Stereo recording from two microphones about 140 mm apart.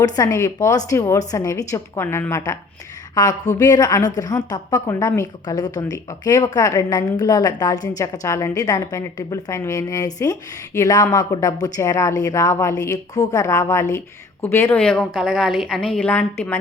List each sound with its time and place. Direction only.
0.0 s a woman's voice: 25° left (ahead or behind)
3.6 s a woman's voice: 25° left (ahead or behind)
14.8 s a woman's voice: 5° left (ahead or behind)